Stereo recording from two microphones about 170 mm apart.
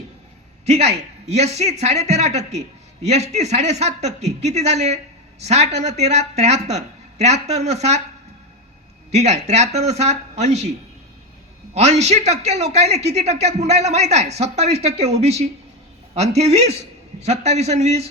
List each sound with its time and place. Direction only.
0.6 s a man's voice: 40° right (ahead or behind)
9.1 s a man's voice: 40° right (ahead or behind)
11.7 s a man's voice: 40° right (ahead or behind)